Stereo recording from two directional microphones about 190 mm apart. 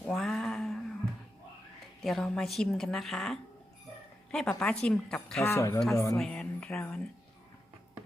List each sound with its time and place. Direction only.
0.0 s cat: centre (ahead or behind)
2.0 s a woman's voice: 5° left (ahead or behind)
6.1 s a woman's voice: centre (ahead or behind)